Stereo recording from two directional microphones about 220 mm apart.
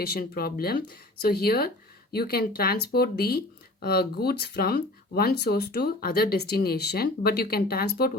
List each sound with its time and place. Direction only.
0.0 s speech: 45° left (ahead or behind)